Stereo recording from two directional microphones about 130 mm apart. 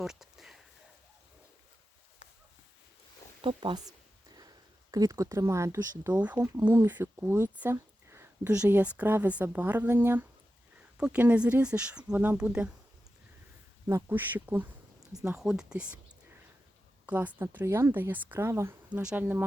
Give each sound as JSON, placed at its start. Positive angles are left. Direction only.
{"t": 0.0, "sound": "a sound", "side_deg": -5}
{"t": 3.4, "sound": "speech", "side_deg": -40}
{"t": 4.4, "sound": "a sound", "side_deg": -30}
{"t": 6.0, "sound": "speech", "side_deg": -15}
{"t": 13.8, "sound": "speech", "side_deg": -20}
{"t": 17.1, "sound": "speech", "side_deg": -15}